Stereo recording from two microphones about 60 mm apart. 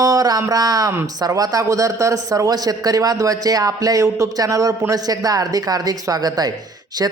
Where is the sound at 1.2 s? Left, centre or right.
Right.